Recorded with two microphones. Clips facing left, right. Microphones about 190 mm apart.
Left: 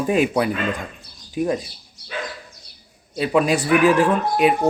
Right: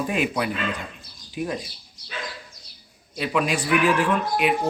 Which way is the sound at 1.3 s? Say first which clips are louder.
Left 6 dB; 45° left (ahead or behind).